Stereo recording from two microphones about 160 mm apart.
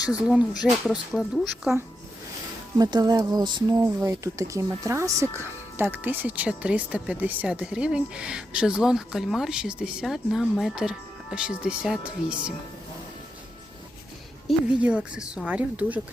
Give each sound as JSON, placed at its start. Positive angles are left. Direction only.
{"t": 0.1, "sound": "speech", "side_deg": -5}
{"t": 2.7, "sound": "speech", "side_deg": -25}
{"t": 14.4, "sound": "speech", "side_deg": -5}